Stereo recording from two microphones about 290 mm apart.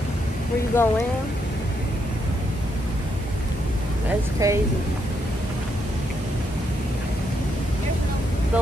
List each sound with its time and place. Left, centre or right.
0.7 s speech: centre
4.4 s speech: centre